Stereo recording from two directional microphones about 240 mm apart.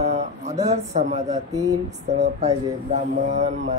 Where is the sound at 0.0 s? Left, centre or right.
Right.